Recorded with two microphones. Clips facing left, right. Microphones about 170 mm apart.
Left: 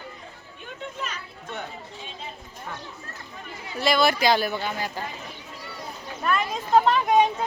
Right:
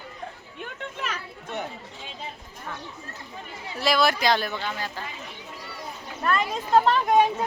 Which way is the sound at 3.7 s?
Centre (ahead or behind).